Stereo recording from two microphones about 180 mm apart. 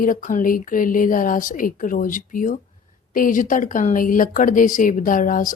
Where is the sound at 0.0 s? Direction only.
50° left (ahead or behind).